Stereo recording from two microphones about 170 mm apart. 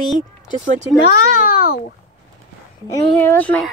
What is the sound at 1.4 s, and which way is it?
Speech, 60° left (ahead or behind).